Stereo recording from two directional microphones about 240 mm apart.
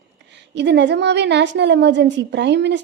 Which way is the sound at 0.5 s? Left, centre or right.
Right.